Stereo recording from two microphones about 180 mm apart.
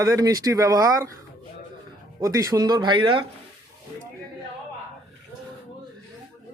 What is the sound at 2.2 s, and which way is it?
Speech, 20° right (ahead or behind).